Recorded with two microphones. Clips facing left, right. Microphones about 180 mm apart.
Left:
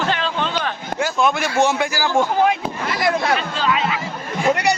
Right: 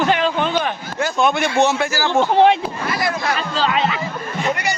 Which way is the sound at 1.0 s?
Centre (ahead or behind).